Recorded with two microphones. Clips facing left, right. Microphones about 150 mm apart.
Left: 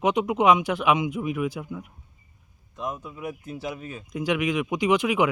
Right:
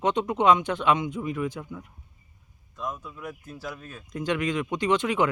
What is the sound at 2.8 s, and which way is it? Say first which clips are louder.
Speech: left 2 dB; 20° left (ahead or behind).